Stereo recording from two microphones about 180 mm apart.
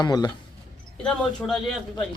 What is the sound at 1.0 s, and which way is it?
Speech, 5° left (ahead or behind).